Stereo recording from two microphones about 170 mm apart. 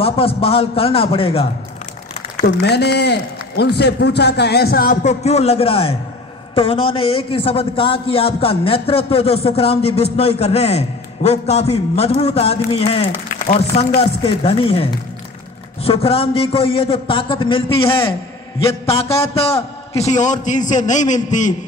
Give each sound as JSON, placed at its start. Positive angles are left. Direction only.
{"t": 0.0, "sound": "a man's voice", "side_deg": 35}
{"t": 2.4, "sound": "a man's voice", "side_deg": 75}
{"t": 5.0, "sound": "a man's voice", "side_deg": 40}
{"t": 20.1, "sound": "a man's voice", "side_deg": 45}